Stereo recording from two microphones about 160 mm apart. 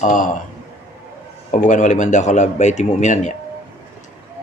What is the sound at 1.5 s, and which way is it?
Speech, 50° left (ahead or behind).